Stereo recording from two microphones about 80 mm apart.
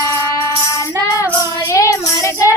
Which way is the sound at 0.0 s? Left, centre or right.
Left.